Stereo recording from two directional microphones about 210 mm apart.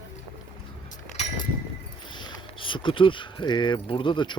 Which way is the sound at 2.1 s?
25° left (ahead or behind).